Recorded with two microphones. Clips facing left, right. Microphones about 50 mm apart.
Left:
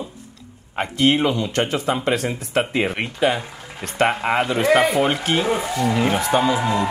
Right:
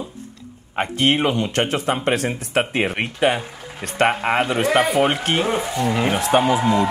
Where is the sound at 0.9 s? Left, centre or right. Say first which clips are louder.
Left 1 dB; right.